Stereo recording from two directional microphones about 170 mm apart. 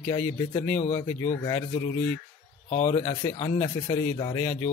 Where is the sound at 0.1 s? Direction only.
20° left (ahead or behind).